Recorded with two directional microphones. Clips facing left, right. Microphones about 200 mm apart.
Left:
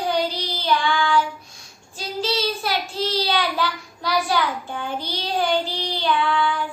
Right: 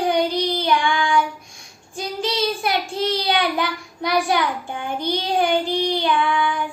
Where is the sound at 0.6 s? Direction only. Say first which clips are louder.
Right 1 dB; 15° right (ahead or behind).